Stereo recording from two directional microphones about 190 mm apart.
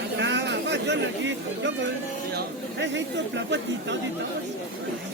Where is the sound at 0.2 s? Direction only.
65° right (ahead or behind).